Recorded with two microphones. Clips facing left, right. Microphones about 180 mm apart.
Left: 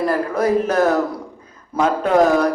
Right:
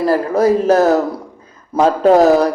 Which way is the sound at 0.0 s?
30° right (ahead or behind).